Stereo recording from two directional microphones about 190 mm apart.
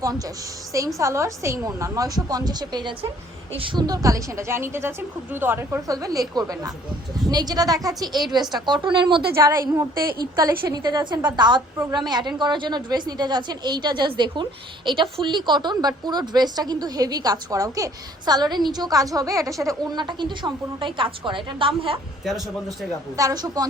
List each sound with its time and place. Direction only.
0.9 s a woman's voice: 15° right (ahead or behind)
9.3 s a woman's voice: 15° right (ahead or behind)
10.0 s a woman's voice: 50° right (ahead or behind)
10.3 s a woman's voice: 15° right (ahead or behind)
23.1 s a woman's voice: 20° right (ahead or behind)